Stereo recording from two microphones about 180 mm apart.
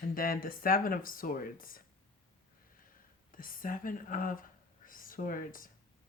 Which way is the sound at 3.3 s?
50° left (ahead or behind).